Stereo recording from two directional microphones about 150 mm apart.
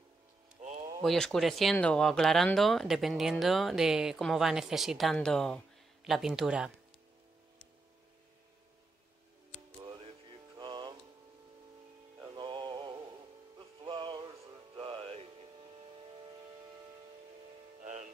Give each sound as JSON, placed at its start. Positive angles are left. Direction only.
{"t": 0.6, "sound": "a sound", "side_deg": -50}
{"t": 1.0, "sound": "speech", "side_deg": 5}
{"t": 9.8, "sound": "music", "side_deg": -40}
{"t": 12.3, "sound": "music", "side_deg": -35}